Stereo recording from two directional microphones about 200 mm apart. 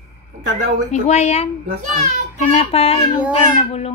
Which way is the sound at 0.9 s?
35° left (ahead or behind).